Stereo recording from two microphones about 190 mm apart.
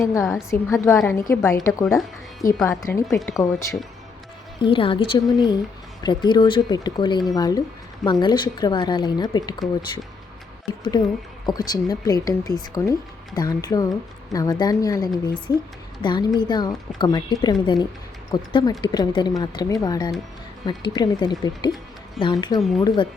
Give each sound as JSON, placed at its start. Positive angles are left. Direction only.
{"t": 0.1, "sound": "a woman's voice", "side_deg": 15}
{"t": 2.6, "sound": "a woman's voice", "side_deg": 15}
{"t": 4.6, "sound": "speech", "side_deg": 30}
{"t": 11.4, "sound": "speech", "side_deg": 20}